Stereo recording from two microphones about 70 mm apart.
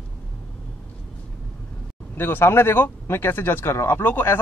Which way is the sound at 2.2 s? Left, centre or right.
Left.